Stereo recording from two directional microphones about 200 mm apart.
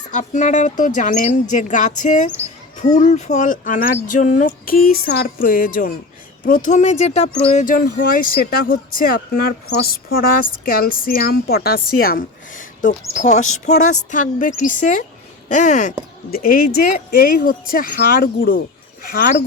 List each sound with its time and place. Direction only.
0.1 s speech: 40° left (ahead or behind)